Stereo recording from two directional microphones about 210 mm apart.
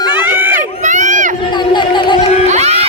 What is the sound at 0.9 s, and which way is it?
Run, 35° right (ahead or behind).